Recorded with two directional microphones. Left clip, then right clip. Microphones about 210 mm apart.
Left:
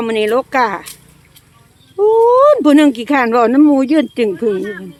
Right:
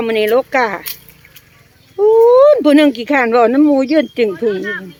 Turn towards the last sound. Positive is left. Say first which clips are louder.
# even
turn(degrees=5)  # may be behind; listen again after turning